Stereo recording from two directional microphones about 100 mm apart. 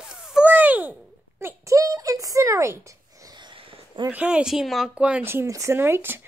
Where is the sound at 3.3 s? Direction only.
50° right (ahead or behind).